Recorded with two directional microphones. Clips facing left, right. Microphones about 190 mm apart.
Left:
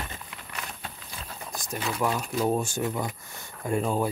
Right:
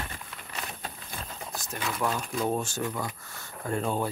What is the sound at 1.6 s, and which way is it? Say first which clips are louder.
Speech: left 3 dB; 10° left (ahead or behind).